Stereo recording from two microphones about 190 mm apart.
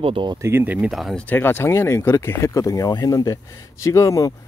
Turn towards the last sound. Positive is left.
turn(degrees=15)  # may be behind; listen again after turning